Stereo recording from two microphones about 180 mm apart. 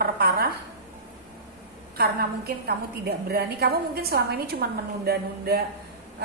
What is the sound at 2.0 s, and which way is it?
A woman's voice, 60° right (ahead or behind).